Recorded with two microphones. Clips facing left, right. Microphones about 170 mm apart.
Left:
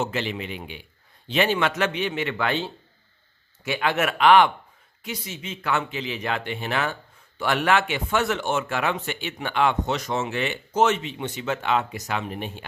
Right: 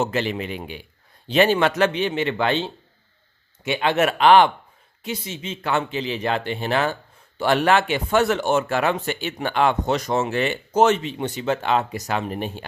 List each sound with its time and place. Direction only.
0.0 s a man's voice: 40° right (ahead or behind)